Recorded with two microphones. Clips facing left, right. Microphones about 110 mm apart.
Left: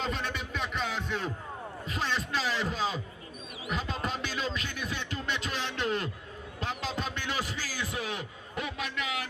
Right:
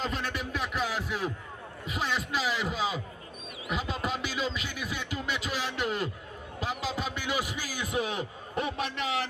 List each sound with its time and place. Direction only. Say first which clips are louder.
0.0 s a sound: right 1 dB; centre (ahead or behind)
1.9 s a man's voice: right 1 dB; 10° right (ahead or behind)
3.7 s music: right 1 dB; 5° right (ahead or behind)
6.6 s a man's voice: right 2 dB; 5° right (ahead or behind); by 9.2 s 30° right (ahead or behind)